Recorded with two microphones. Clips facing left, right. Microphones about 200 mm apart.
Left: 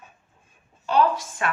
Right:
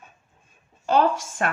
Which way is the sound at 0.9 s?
45° right (ahead or behind).